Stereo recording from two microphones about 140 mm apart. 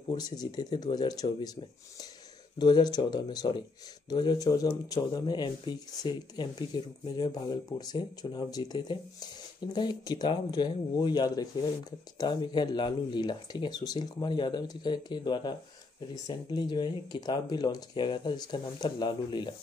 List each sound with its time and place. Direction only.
0.1 s speech: 30° left (ahead or behind)